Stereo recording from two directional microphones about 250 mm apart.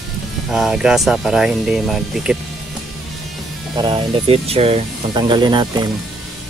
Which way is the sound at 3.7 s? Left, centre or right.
Centre.